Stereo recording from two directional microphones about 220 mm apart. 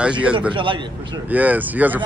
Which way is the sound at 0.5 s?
20° right (ahead or behind).